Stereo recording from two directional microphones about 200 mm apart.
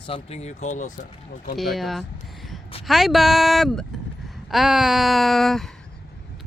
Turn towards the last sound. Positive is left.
turn(degrees=0)  # may be behind; listen again after turning